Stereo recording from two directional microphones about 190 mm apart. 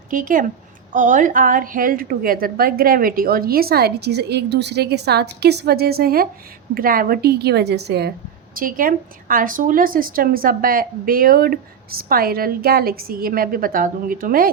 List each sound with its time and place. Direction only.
0.1 s a woman's voice: 45° right (ahead or behind)
8.5 s speech: 45° right (ahead or behind)